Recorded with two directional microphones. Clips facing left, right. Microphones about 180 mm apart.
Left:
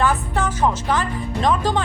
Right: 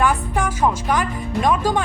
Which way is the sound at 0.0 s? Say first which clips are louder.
Right 1 dB; 10° right (ahead or behind).